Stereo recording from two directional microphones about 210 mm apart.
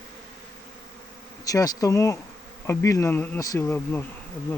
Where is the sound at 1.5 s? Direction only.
15° left (ahead or behind).